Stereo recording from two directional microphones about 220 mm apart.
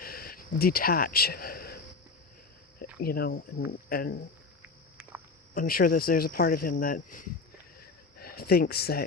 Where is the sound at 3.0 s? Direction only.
45° left (ahead or behind).